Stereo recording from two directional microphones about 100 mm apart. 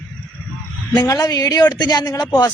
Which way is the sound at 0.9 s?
35° left (ahead or behind).